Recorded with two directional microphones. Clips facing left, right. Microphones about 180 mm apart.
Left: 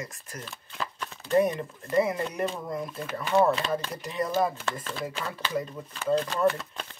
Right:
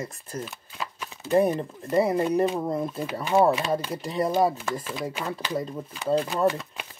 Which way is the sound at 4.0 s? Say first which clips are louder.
Right 4 dB; 35° right (ahead or behind).